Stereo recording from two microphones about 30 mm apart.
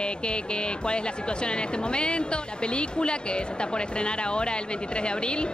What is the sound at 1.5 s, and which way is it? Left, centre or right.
A woman's voice, left.